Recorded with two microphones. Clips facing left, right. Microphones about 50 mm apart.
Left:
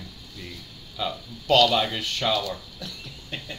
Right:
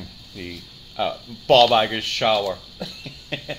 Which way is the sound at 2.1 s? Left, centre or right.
Right.